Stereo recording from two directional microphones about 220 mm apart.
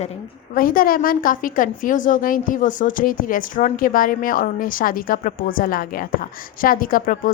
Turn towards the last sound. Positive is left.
turn(degrees=40)  # may be behind; listen again after turning